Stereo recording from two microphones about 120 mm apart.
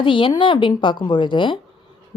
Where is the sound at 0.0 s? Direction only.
45° left (ahead or behind).